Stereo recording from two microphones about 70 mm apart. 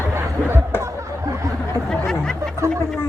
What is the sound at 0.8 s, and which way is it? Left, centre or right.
Chatter, right.